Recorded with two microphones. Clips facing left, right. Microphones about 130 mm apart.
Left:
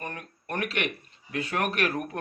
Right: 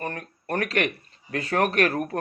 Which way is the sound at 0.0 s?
35° right (ahead or behind).